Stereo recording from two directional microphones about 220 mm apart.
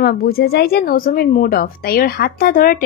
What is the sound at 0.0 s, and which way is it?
Speech, 45° left (ahead or behind).